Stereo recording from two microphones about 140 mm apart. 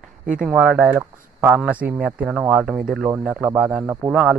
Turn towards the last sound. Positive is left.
turn(degrees=-5)  # may be behind; listen again after turning